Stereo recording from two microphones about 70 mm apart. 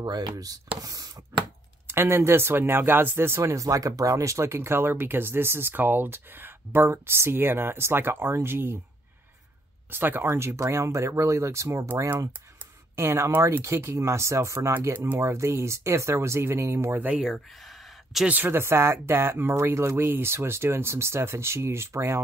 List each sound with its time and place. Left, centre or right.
0.0 s speech: right
1.9 s speech: right
9.8 s speech: right
12.9 s speech: right
14.9 s speech: right
17.2 s a sound: centre
18.2 s speech: right
18.5 s speech: right